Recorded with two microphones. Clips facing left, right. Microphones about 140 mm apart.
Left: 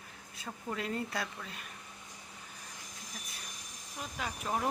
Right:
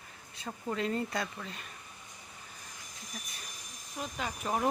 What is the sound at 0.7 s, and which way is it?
Speech, 5° left (ahead or behind).